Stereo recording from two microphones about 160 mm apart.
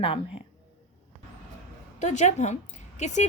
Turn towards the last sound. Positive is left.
turn(degrees=45)  # may be behind; listen again after turning